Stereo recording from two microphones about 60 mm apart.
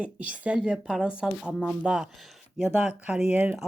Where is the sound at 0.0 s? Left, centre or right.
Right.